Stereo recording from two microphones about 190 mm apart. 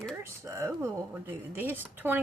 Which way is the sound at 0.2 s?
15° right (ahead or behind).